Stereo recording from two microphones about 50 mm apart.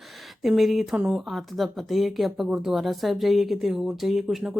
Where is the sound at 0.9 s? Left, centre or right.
Right.